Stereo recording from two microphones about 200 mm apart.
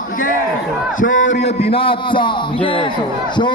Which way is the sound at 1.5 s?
30° left (ahead or behind).